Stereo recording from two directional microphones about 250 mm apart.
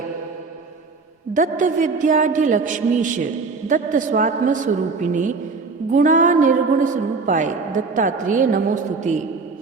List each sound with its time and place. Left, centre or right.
1.3 s a woman's voice: right